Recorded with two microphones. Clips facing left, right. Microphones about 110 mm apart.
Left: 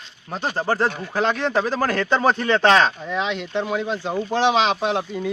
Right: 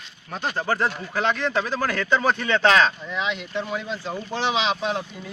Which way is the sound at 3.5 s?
60° left (ahead or behind).